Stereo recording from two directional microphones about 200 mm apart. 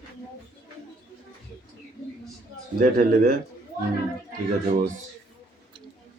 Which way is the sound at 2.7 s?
45° right (ahead or behind).